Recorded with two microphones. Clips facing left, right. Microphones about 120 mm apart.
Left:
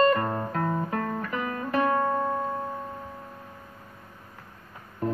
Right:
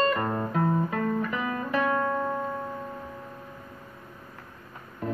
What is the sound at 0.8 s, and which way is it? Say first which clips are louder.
Guitar: right 2 dB; 40° left (ahead or behind).